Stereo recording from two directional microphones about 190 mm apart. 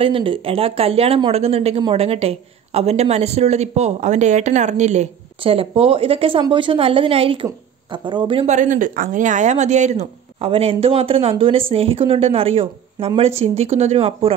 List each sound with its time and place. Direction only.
0.0 s speech: 30° right (ahead or behind)